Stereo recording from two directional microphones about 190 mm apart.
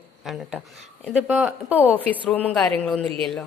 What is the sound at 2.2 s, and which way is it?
Speech, 10° left (ahead or behind).